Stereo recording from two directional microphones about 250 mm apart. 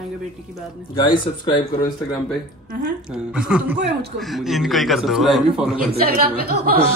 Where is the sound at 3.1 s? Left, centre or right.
Centre.